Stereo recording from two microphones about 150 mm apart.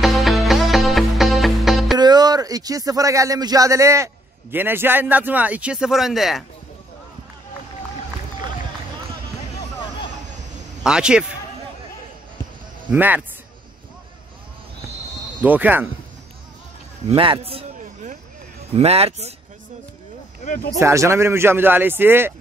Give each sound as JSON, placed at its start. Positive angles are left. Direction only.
{"t": 0.0, "sound": "music", "side_deg": 0}
{"t": 2.0, "sound": "speech", "side_deg": -30}
{"t": 10.8, "sound": "a man's voice", "side_deg": -5}
{"t": 12.9, "sound": "speech", "side_deg": -10}
{"t": 15.4, "sound": "speech", "side_deg": -10}
{"t": 17.1, "sound": "a man's voice", "side_deg": -35}
{"t": 18.8, "sound": "speech", "side_deg": -45}
{"t": 20.4, "sound": "speech", "side_deg": 85}
{"t": 20.8, "sound": "speech", "side_deg": -20}